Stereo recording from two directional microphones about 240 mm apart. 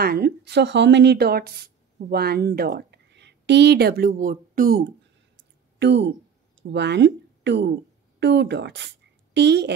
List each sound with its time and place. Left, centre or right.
0.0 s a woman's voice: right